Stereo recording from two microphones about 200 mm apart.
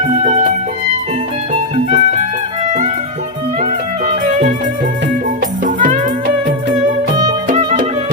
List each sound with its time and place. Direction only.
0.0 s music: 35° right (ahead or behind)
1.7 s music: 35° right (ahead or behind)
5.6 s music: 40° right (ahead or behind)